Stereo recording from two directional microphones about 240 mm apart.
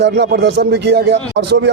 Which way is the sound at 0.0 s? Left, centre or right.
Right.